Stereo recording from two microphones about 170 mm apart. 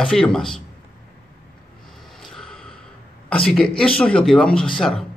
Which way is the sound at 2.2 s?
5° left (ahead or behind).